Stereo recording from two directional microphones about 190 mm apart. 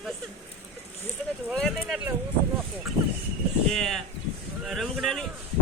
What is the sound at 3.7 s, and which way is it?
Speech, 5° left (ahead or behind).